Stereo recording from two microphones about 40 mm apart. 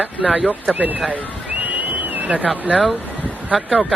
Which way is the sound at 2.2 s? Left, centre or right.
Right.